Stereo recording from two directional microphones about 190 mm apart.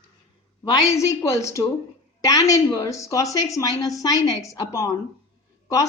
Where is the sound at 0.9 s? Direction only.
15° left (ahead or behind).